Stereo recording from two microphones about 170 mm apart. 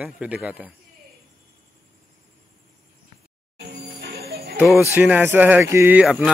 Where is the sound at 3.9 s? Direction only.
70° right (ahead or behind).